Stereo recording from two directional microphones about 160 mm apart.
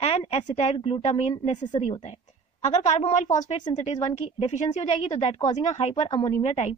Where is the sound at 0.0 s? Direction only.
40° left (ahead or behind).